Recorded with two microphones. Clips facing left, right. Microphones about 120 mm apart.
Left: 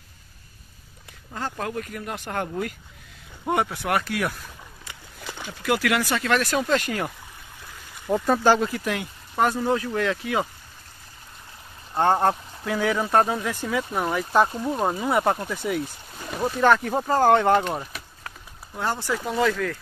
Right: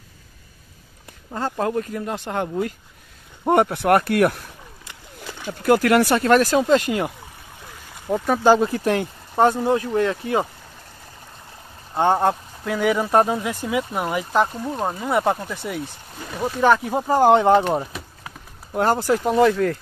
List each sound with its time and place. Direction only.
1.3 s speech: 30° right (ahead or behind)
3.4 s speech: 50° right (ahead or behind)
5.5 s speech: 45° right (ahead or behind)
6.6 s speech: 25° right (ahead or behind)
8.1 s speech: 5° right (ahead or behind)
8.5 s speech: 35° right (ahead or behind)
11.9 s speech: 10° right (ahead or behind)
13.1 s speech: 15° right (ahead or behind)
14.3 s speech: centre (ahead or behind); by 17.6 s 15° right (ahead or behind)
18.7 s speech: 50° right (ahead or behind)
19.2 s speech: 30° right (ahead or behind)